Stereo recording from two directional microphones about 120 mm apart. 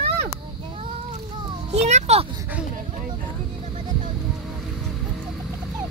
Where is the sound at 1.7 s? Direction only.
70° right (ahead or behind).